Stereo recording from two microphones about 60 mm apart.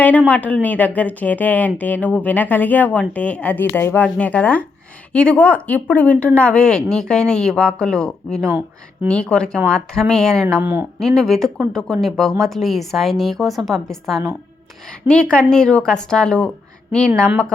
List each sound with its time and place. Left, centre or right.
0.3 s speech: left
3.6 s speech: left
4.0 s speech: left
8.4 s speech: right
9.0 s speech: centre
10.6 s speech: right
11.0 s a woman's voice: centre
15.0 s speech: centre